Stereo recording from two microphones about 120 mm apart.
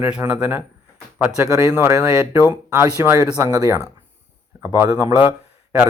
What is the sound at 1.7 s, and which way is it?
Speech, 20° right (ahead or behind).